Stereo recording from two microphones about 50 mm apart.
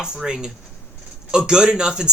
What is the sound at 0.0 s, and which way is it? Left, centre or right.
Speech, centre.